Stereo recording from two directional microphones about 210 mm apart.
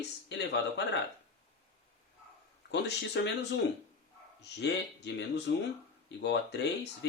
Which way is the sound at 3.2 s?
55° left (ahead or behind).